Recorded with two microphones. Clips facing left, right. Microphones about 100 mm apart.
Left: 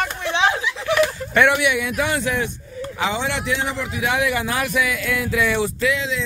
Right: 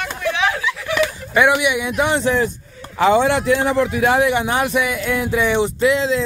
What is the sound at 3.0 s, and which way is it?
A man's voice, 50° right (ahead or behind).